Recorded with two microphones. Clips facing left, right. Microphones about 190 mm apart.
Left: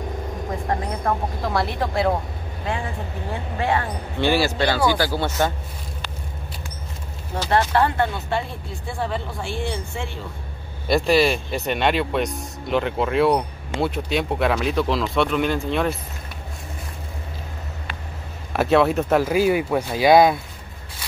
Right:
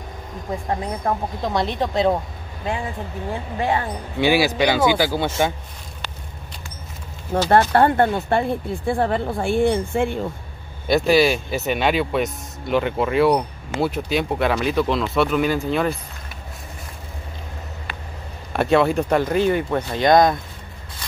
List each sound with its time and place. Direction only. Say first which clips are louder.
1.0 s speech: right 1 dB; 20° right (ahead or behind)
3.5 s speech: even; 20° right (ahead or behind)
7.3 s speech: right 4 dB; 50° right (ahead or behind)
10.9 s speech: right 2 dB; centre (ahead or behind)
18.5 s speech: even; centre (ahead or behind)